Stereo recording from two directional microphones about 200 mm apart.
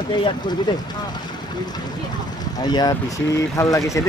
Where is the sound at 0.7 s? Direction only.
20° left (ahead or behind).